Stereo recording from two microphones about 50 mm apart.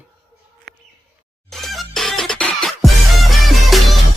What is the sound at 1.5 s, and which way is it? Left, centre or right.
Music, centre.